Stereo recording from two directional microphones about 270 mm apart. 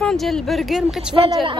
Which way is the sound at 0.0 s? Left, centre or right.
Centre.